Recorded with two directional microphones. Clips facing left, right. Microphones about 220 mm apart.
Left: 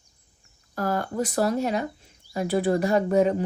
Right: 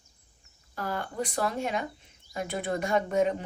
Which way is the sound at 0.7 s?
45° left (ahead or behind).